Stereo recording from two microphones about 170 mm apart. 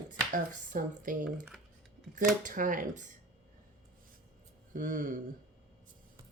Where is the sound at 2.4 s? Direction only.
50° right (ahead or behind).